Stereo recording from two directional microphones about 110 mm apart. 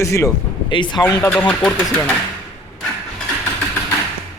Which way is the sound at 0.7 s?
45° left (ahead or behind).